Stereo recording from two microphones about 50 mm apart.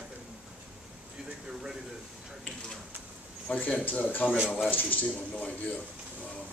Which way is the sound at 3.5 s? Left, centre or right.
Left.